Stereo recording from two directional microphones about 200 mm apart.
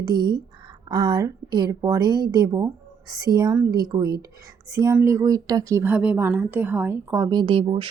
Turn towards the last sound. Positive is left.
turn(degrees=-25)  # may be behind; listen again after turning